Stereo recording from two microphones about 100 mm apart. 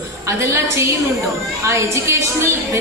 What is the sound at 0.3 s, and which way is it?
A woman's voice, 25° right (ahead or behind).